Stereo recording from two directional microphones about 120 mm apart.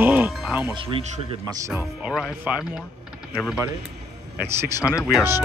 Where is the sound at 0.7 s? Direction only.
45° right (ahead or behind).